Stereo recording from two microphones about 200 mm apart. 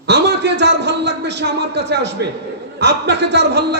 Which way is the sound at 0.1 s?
60° right (ahead or behind).